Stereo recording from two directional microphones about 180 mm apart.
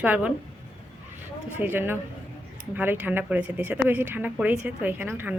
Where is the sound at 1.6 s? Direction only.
10° right (ahead or behind).